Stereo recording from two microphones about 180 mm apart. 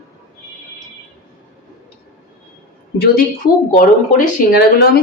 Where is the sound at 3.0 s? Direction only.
55° left (ahead or behind).